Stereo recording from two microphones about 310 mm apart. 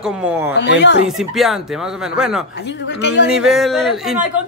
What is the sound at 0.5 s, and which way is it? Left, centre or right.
Speech, left.